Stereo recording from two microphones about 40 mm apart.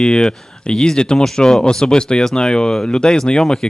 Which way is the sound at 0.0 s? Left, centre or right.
Centre.